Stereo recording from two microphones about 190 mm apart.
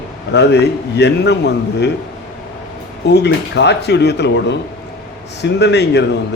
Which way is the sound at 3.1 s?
60° left (ahead or behind).